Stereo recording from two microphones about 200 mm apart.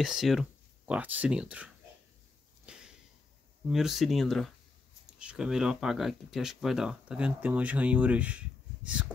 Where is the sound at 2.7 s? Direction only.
5° right (ahead or behind).